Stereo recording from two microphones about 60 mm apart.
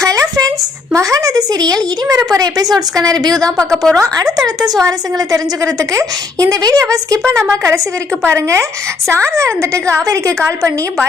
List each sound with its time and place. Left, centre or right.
0.0 s a sound: right
0.9 s a woman's voice: right
3.3 s a woman's voice: centre
4.4 s a woman's voice: right
4.8 s a woman's voice: right
8.2 s a woman's voice: right